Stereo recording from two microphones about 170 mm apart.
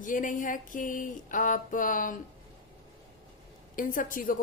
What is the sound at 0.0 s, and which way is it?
A woman's voice, 50° left (ahead or behind).